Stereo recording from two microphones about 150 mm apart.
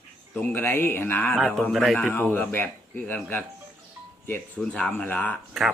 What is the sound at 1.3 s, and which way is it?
Speech, centre (ahead or behind).